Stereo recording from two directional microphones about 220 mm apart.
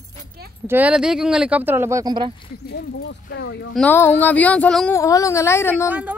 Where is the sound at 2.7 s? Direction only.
50° left (ahead or behind).